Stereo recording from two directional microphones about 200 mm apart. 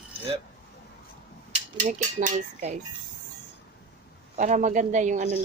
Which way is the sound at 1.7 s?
35° right (ahead or behind).